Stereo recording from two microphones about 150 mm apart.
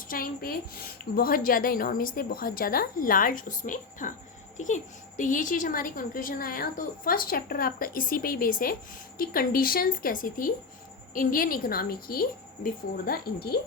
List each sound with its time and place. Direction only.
0.1 s a child's voice: 75° left (ahead or behind)